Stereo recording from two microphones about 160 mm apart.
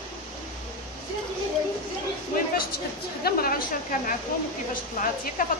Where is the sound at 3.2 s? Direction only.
65° left (ahead or behind).